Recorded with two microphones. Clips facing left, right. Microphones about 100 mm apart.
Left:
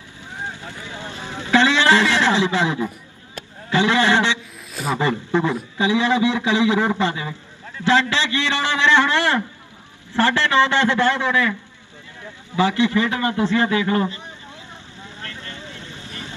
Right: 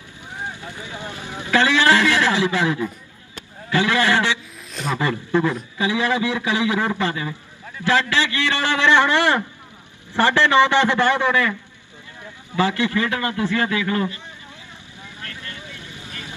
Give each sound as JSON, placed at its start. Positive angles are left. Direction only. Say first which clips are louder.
{"t": 0.4, "sound": "vehicle", "louder": "even", "side_deg": -15}
{"t": 1.4, "sound": "a man's voice", "louder": "left 1 dB", "side_deg": 20}
{"t": 8.8, "sound": "a man's voice", "louder": "right 1 dB", "side_deg": -15}
{"t": 12.5, "sound": "a man's voice", "louder": "left 2 dB", "side_deg": 20}
{"t": 15.8, "sound": "vehicle", "louder": "left 1 dB", "side_deg": -15}